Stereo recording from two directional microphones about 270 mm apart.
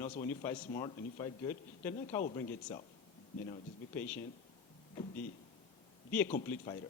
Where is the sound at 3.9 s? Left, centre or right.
Centre.